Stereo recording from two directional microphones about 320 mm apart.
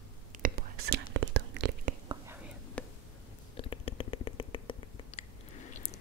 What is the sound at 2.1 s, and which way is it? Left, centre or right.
Whispering, centre.